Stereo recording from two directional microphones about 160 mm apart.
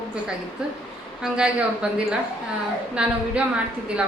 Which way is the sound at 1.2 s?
5° right (ahead or behind).